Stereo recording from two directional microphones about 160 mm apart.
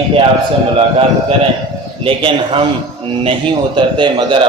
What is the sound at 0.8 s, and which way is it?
A man's voice, 35° right (ahead or behind).